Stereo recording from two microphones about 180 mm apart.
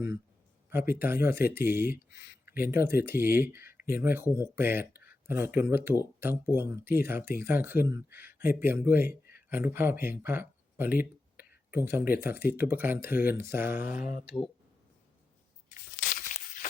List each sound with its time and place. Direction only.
0.7 s speech: 10° right (ahead or behind)
16.0 s tearing: 50° left (ahead or behind)